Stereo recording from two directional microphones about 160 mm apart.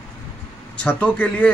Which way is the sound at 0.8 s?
10° left (ahead or behind).